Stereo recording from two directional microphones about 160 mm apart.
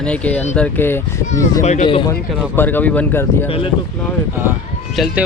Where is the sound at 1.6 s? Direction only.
50° left (ahead or behind).